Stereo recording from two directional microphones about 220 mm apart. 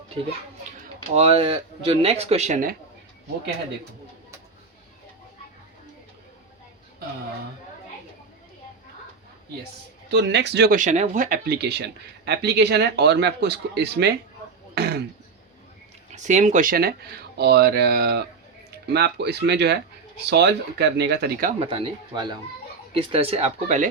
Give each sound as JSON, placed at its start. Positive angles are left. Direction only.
{"t": 1.1, "sound": "speech", "side_deg": -25}
{"t": 10.1, "sound": "speech", "side_deg": -50}
{"t": 16.1, "sound": "speech", "side_deg": -35}
{"t": 21.6, "sound": "speech", "side_deg": -25}